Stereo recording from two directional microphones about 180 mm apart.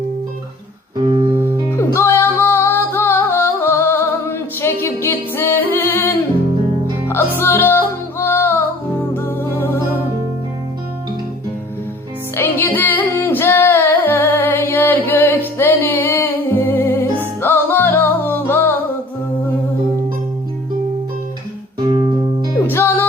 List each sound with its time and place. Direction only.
0.9 s music: 25° right (ahead or behind)
1.7 s music: 15° left (ahead or behind)
12.4 s music: 10° left (ahead or behind)
22.5 s music: 15° left (ahead or behind)